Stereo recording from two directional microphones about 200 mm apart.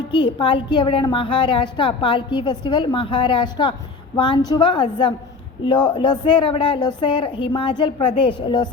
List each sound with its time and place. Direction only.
0.1 s a woman's voice: 25° left (ahead or behind)